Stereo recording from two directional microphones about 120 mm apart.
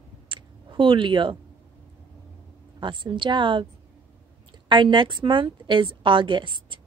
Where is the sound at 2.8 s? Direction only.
45° right (ahead or behind).